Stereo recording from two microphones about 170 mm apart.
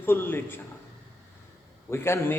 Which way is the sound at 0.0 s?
15° left (ahead or behind).